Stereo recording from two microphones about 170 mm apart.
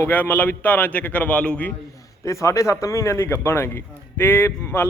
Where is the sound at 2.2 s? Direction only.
15° left (ahead or behind).